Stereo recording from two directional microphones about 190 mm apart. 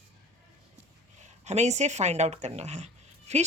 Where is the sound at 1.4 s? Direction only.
35° right (ahead or behind).